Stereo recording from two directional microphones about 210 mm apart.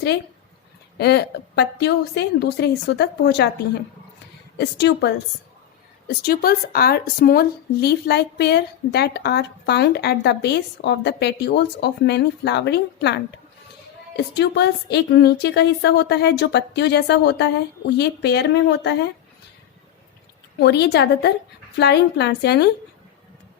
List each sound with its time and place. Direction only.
0.9 s speech: 50° left (ahead or behind)
4.5 s a woman's voice: 55° left (ahead or behind)
14.3 s speech: 50° left (ahead or behind)
20.6 s speech: 55° left (ahead or behind)